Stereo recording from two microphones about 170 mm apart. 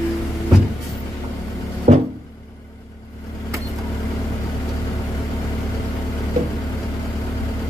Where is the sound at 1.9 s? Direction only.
40° right (ahead or behind).